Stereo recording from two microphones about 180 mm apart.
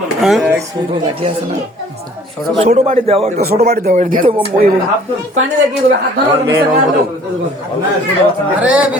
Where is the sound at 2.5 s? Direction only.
35° right (ahead or behind).